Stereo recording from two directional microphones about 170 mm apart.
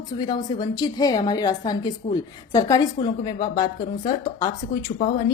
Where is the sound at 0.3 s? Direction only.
25° left (ahead or behind).